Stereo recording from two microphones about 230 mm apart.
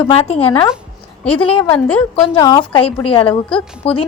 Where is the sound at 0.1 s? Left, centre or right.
Left.